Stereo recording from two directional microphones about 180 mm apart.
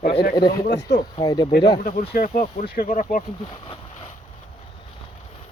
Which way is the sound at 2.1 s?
50° left (ahead or behind).